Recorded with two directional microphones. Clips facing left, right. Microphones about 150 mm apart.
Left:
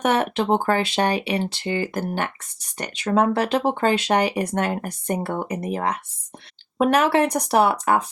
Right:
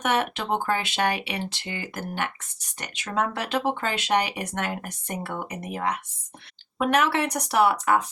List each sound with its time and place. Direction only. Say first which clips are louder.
0.0 s speech: left 5 dB; 35° left (ahead or behind)